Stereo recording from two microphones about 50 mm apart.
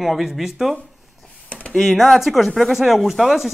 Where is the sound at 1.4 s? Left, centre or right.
Left.